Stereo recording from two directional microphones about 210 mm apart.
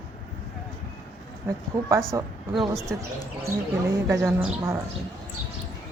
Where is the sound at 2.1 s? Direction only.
15° right (ahead or behind).